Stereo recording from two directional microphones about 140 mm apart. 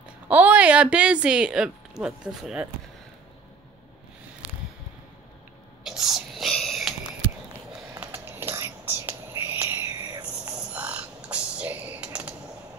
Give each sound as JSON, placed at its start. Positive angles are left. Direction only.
{"t": 0.3, "sound": "speech", "side_deg": -10}
{"t": 5.9, "sound": "whispering", "side_deg": -5}
{"t": 7.9, "sound": "whispering", "side_deg": -15}
{"t": 10.7, "sound": "typing", "side_deg": -10}